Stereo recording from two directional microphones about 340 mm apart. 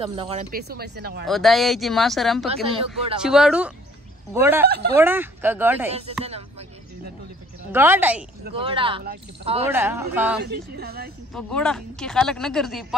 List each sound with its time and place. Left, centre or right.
0.0 s speech: centre
1.2 s speech: centre
2.4 s a woman's voice: centre
3.2 s a woman's voice: centre
7.7 s speech: centre
8.5 s a woman's voice: centre
9.7 s a woman's voice: centre
10.4 s speech: right
11.3 s speech: centre